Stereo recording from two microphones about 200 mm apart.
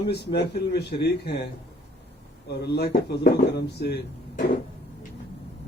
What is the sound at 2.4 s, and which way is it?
Speech, 55° left (ahead or behind).